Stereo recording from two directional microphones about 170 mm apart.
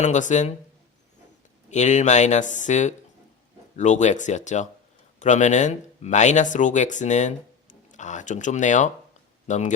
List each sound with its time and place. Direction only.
0.0 s speech: 45° left (ahead or behind)
1.7 s speech: 45° left (ahead or behind)